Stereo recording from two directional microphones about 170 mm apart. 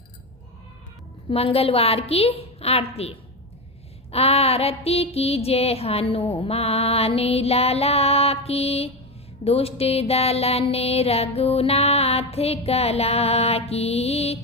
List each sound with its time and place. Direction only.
1.3 s music: 35° left (ahead or behind)